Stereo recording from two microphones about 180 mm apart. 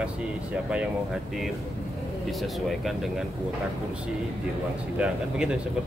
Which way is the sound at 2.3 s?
Centre (ahead or behind).